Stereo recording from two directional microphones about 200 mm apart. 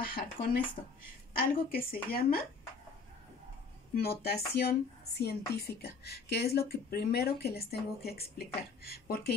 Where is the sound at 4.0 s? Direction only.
50° left (ahead or behind).